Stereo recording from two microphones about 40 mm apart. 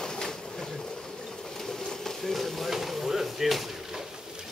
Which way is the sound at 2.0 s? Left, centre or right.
Centre.